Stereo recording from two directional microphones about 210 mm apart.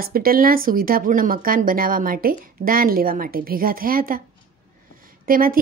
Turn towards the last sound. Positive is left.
turn(degrees=-45)  # may be behind; listen again after turning